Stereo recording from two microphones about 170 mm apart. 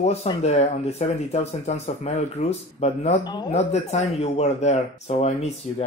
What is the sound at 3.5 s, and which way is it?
Speech, 40° left (ahead or behind).